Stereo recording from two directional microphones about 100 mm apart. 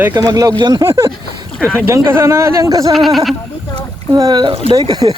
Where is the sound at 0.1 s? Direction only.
35° right (ahead or behind).